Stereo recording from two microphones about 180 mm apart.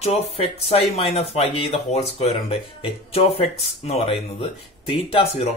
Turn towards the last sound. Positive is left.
turn(degrees=35)  # may be behind; listen again after turning